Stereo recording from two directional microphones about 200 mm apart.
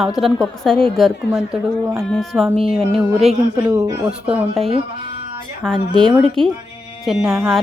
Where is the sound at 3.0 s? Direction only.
5° right (ahead or behind).